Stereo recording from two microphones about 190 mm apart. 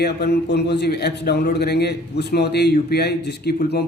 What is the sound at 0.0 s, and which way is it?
A man's voice, 60° left (ahead or behind).